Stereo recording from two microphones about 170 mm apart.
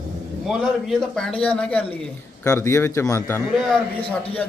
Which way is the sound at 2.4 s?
15° left (ahead or behind).